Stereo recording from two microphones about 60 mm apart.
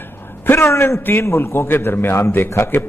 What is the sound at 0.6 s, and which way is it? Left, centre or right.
A man's voice, left.